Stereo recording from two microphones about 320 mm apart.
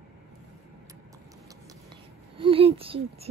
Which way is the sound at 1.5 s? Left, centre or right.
Centre.